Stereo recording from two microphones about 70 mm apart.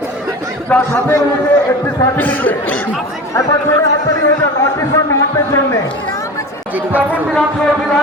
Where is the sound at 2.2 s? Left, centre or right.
Left.